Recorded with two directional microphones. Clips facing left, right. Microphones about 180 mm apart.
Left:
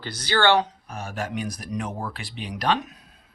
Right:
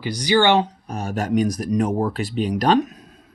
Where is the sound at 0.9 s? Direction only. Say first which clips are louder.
Right 8 dB; 40° right (ahead or behind).